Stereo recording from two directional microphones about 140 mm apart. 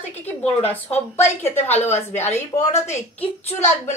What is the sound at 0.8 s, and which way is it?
Speech, 50° left (ahead or behind).